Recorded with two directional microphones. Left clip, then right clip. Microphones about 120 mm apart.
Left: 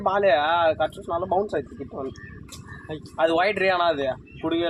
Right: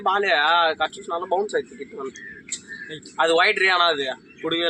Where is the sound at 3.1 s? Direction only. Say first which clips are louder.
Right 3 dB; 70° left (ahead or behind).